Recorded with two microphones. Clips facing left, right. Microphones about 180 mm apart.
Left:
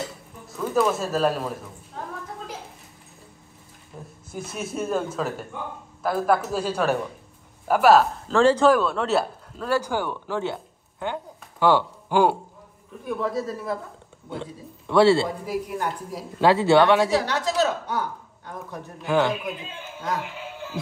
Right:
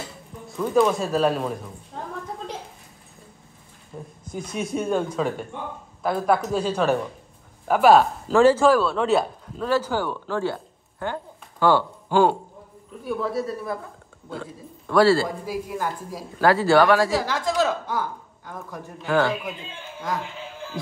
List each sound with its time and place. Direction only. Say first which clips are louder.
0.5 s speech: right 3 dB; centre (ahead or behind)
4.2 s speech: right 3 dB; 5° left (ahead or behind)
14.3 s a man's voice: left 1 dB; 25° left (ahead or behind)
15.4 s speech: even; centre (ahead or behind)
16.3 s a man's voice: even; 20° left (ahead or behind)
17.3 s speech: even; centre (ahead or behind)
19.2 s speech: even; centre (ahead or behind)
20.5 s music: left 1 dB; 5° left (ahead or behind)